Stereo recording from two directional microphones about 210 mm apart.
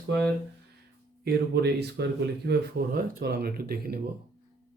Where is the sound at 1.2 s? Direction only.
50° right (ahead or behind).